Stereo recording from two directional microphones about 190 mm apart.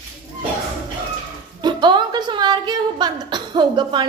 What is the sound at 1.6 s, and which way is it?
A woman's voice, 25° right (ahead or behind).